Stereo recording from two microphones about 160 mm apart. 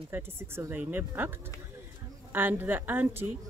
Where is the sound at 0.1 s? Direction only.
10° right (ahead or behind).